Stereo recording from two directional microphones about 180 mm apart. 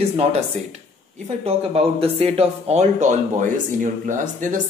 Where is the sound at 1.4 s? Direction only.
35° right (ahead or behind).